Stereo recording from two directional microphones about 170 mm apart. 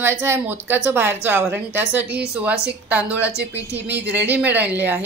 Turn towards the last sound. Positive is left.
turn(degrees=-10)  # may be behind; listen again after turning